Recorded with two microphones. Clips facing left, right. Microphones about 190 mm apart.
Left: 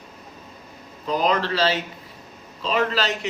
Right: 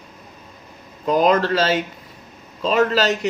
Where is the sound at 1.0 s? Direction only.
45° right (ahead or behind).